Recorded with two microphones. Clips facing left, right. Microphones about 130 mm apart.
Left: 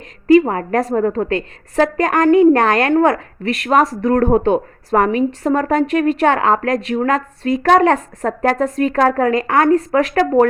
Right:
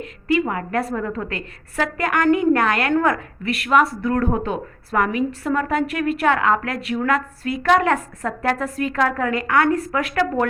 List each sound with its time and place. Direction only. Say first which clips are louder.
0.3 s a woman's voice: left 9 dB; 40° left (ahead or behind)